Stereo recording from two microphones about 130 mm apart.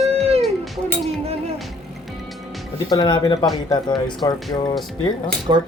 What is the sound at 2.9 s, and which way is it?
Speech, 30° left (ahead or behind).